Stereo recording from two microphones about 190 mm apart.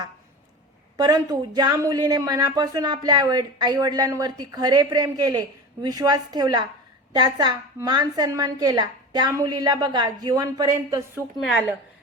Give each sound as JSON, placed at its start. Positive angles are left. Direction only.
{"t": 0.9, "sound": "speech", "side_deg": -20}
{"t": 11.3, "sound": "a woman's voice", "side_deg": 0}